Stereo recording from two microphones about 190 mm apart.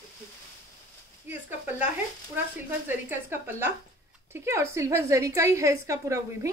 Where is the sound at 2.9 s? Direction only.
10° right (ahead or behind).